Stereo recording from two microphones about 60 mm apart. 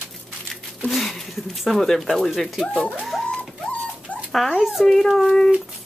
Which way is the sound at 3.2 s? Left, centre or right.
Centre.